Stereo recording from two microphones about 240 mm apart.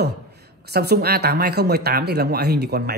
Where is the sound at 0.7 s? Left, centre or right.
Right.